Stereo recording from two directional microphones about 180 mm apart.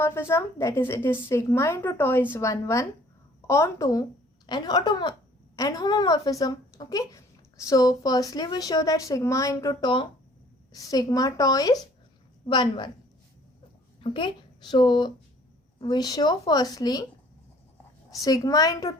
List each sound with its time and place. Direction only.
0.0 s a woman's voice: 15° left (ahead or behind)
14.0 s a woman's voice: 25° left (ahead or behind)
18.2 s a woman's voice: 20° left (ahead or behind)